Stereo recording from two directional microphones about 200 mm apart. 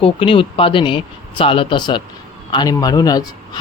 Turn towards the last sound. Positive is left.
turn(degrees=20)  # may be behind; listen again after turning